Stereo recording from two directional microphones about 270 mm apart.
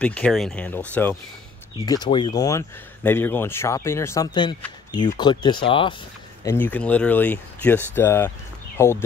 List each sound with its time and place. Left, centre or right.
0.0 s speech: centre
1.9 s speech: centre
6.4 s speech: centre